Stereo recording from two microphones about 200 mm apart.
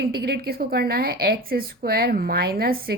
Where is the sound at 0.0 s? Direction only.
50° right (ahead or behind).